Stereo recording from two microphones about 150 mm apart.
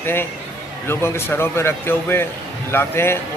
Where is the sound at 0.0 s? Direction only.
15° left (ahead or behind).